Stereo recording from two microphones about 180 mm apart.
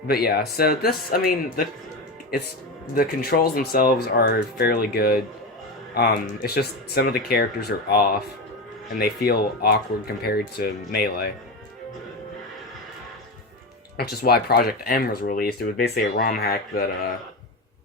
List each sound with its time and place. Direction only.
0.1 s speech: 60° left (ahead or behind)
2.9 s speech: 55° left (ahead or behind)
13.9 s speech: 60° left (ahead or behind)